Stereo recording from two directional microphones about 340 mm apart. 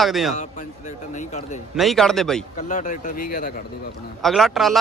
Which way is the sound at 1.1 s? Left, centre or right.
Left.